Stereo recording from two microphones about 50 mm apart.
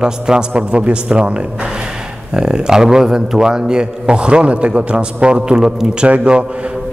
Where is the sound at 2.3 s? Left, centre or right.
Centre.